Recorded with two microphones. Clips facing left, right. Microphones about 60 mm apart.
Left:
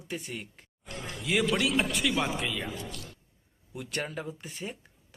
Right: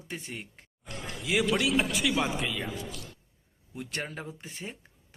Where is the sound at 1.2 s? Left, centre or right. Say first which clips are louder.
Even; centre.